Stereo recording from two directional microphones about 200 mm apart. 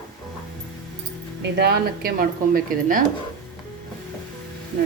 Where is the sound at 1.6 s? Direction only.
50° right (ahead or behind).